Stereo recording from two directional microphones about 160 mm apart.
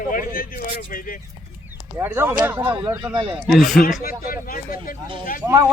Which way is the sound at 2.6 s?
30° right (ahead or behind).